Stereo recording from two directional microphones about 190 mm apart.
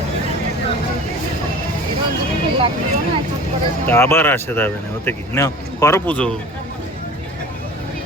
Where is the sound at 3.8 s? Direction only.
10° left (ahead or behind).